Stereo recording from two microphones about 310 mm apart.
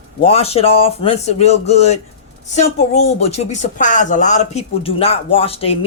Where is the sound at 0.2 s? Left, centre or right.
Centre.